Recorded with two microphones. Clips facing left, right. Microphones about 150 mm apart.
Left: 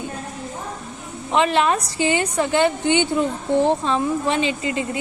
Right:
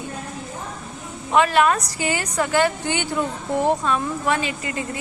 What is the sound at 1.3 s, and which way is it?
A woman's voice, 25° left (ahead or behind).